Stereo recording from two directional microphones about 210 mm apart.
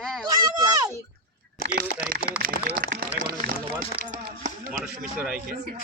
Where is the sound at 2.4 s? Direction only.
45° right (ahead or behind).